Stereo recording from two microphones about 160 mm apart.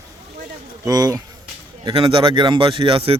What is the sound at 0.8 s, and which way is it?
Speech, 25° right (ahead or behind).